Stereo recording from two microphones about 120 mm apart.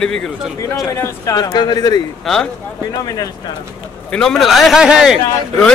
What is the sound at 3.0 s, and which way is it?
Speech, 30° left (ahead or behind).